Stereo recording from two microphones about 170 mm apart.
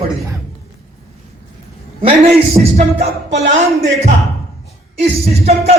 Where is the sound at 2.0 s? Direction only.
35° right (ahead or behind).